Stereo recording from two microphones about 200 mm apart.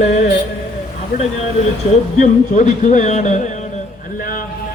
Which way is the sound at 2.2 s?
40° left (ahead or behind).